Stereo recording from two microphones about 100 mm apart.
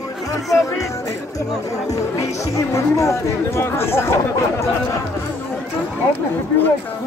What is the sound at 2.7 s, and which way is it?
Speech, 30° left (ahead or behind).